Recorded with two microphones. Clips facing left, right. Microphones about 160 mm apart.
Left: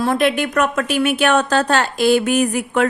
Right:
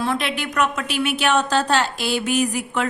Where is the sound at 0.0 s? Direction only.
45° left (ahead or behind).